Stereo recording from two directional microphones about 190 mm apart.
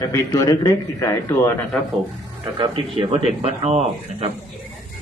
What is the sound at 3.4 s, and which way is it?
Speech, 35° right (ahead or behind).